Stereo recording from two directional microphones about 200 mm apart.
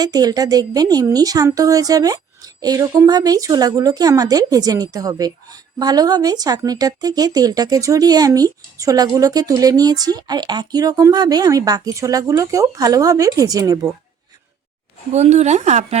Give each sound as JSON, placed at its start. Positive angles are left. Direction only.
{"t": 0.0, "sound": "speech", "side_deg": -20}
{"t": 15.1, "sound": "speech", "side_deg": -35}